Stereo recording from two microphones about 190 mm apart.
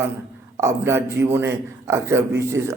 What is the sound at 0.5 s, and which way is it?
Speech, 15° right (ahead or behind).